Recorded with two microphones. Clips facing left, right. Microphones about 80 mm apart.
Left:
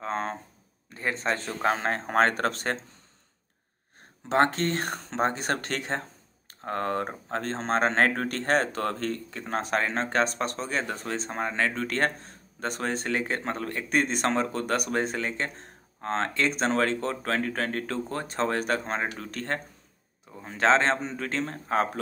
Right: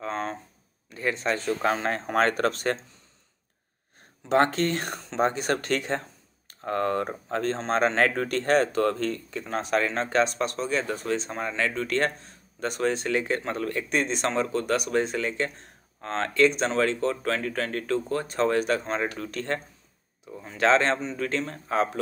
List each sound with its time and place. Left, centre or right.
0.0 s a sound: left
0.8 s speech: left
4.3 s speech: left
13.8 s speech: left